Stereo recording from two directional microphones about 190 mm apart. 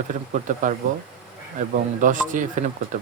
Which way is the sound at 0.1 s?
40° right (ahead or behind).